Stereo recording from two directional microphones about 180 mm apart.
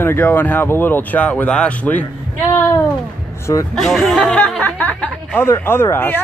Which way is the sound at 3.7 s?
Centre (ahead or behind).